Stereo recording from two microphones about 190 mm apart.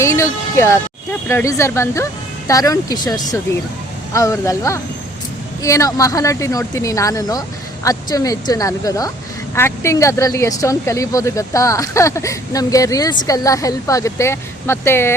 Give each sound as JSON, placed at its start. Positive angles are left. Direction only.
{"t": 0.0, "sound": "speech", "side_deg": 15}